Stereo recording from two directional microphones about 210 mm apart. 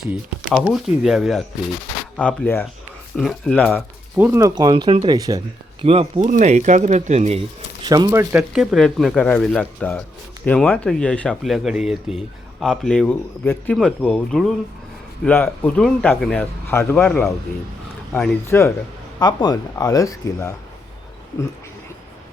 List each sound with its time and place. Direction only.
0.0 s speech: centre (ahead or behind); by 7.4 s 35° right (ahead or behind)
7.9 s speech: 20° right (ahead or behind); by 20.5 s 15° left (ahead or behind)